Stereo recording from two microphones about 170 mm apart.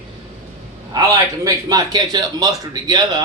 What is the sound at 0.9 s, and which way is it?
A man's voice, 20° right (ahead or behind).